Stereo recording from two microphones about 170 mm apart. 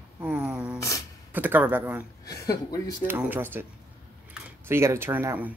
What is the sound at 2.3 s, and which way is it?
Speech, 20° left (ahead or behind).